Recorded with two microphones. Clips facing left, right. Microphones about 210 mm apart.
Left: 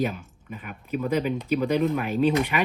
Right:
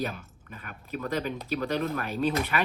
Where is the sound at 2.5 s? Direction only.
10° left (ahead or behind).